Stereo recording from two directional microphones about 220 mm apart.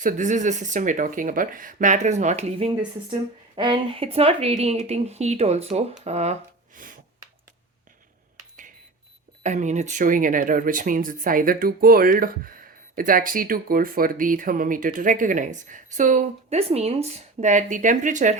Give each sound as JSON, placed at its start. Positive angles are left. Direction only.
{"t": 0.0, "sound": "speech", "side_deg": -35}
{"t": 6.7, "sound": "gasp", "side_deg": -40}
{"t": 9.4, "sound": "speech", "side_deg": -35}